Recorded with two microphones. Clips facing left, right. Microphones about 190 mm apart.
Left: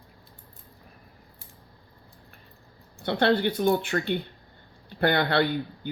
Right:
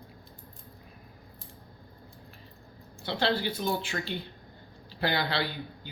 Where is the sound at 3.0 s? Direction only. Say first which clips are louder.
Left 6 dB; 60° left (ahead or behind).